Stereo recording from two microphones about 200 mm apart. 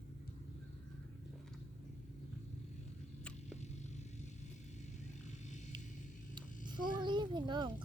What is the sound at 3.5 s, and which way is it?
Vehicle, 35° left (ahead or behind).